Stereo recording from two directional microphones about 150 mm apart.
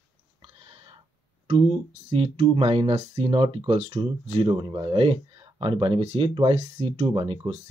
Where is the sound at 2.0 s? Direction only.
40° right (ahead or behind).